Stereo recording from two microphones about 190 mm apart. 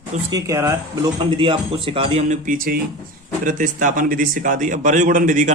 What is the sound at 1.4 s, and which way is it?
Speech, 30° right (ahead or behind).